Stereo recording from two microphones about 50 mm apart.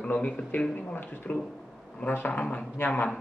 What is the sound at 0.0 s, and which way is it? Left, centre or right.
Speech, left.